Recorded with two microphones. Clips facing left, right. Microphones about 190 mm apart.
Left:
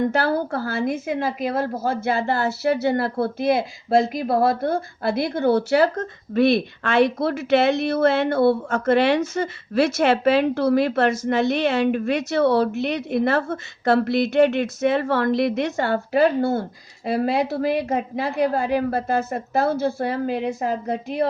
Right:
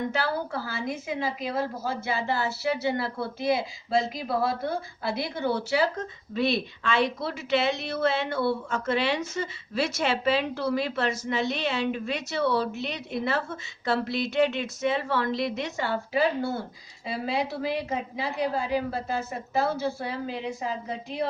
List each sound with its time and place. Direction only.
0.1 s a woman's voice: 55° left (ahead or behind)